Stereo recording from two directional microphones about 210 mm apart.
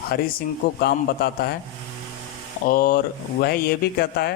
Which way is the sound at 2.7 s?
45° left (ahead or behind).